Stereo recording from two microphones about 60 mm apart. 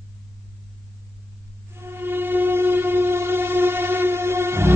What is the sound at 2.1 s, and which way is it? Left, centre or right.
Train, right.